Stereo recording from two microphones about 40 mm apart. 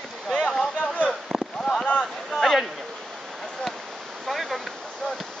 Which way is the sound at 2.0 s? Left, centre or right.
Centre.